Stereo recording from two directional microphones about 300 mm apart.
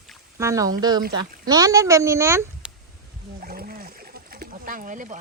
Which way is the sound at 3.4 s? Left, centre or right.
Right.